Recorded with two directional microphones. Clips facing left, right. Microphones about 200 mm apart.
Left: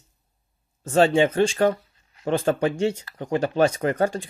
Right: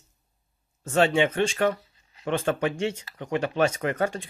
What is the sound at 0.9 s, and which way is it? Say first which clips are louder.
Speech: left 4 dB; 35° left (ahead or behind).